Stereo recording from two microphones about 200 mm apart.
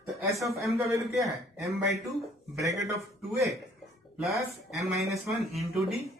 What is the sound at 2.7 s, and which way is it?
Speech, 15° right (ahead or behind).